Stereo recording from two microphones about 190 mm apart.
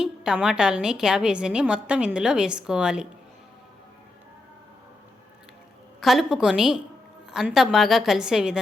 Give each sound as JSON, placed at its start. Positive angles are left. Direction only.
{"t": 0.0, "sound": "a woman's voice", "side_deg": -5}
{"t": 6.0, "sound": "a woman's voice", "side_deg": 0}